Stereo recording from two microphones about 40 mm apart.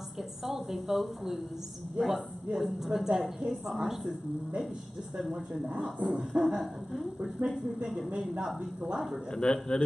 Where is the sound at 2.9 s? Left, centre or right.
Centre.